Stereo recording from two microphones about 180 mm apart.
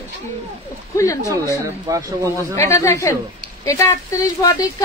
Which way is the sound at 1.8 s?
20° right (ahead or behind).